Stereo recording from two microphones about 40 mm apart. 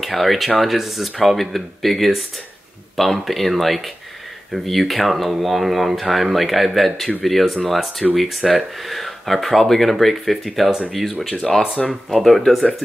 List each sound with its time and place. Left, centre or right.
0.0 s speech: centre